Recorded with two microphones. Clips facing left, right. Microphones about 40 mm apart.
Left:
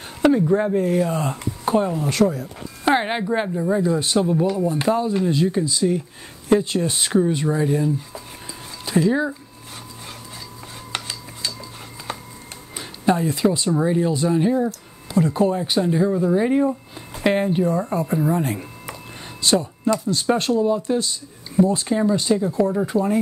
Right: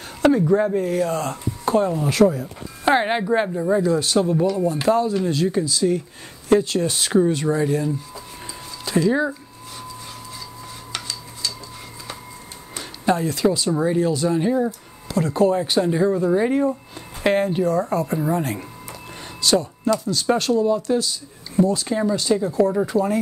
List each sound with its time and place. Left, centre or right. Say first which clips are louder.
0.2 s speech: even; centre
3.8 s speech: right 1 dB; centre
7.1 s speech: right 1 dB; centre
9.1 s speech: right 1 dB; centre
10.9 s cutlery: left 2 dB; left
12.7 s a sound: left 1 dB; centre
13.3 s speech: even; centre
13.7 s speech: even; centre
19.4 s speech: even; centre
21.8 s speech: left 1 dB; centre
22.8 s speech: even; centre